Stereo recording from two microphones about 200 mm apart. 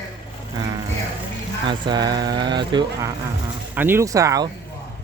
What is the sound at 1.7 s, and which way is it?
Speech, 20° right (ahead or behind).